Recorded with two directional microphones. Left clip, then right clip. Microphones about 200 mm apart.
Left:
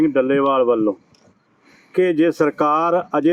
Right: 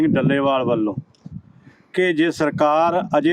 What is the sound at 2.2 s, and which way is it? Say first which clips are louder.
Speech: left 1 dB; 30° right (ahead or behind).